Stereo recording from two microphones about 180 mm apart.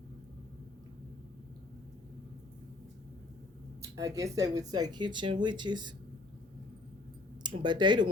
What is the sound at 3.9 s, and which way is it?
Speech, 20° right (ahead or behind).